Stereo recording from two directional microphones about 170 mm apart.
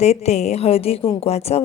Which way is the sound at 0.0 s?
40° left (ahead or behind).